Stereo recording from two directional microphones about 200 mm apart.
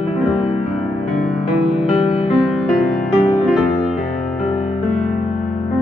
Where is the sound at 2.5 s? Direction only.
Centre (ahead or behind).